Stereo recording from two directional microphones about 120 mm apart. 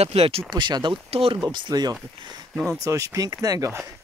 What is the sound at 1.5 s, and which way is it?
Speech, 35° right (ahead or behind).